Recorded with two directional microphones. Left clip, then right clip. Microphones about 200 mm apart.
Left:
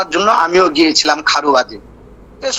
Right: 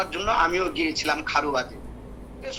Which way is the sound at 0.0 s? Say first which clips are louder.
Left 10 dB; 60° left (ahead or behind).